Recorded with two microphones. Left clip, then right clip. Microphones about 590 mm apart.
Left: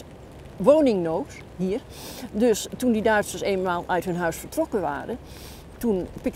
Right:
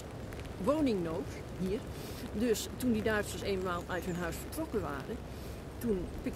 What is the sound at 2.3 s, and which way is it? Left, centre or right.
Speech, left.